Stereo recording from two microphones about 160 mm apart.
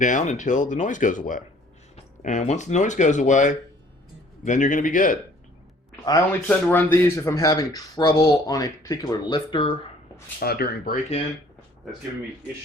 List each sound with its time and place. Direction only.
0.0 s a man's voice: 50° left (ahead or behind)
6.5 s speech: 10° left (ahead or behind); by 9.7 s 30° left (ahead or behind)
10.4 s speech: 75° left (ahead or behind)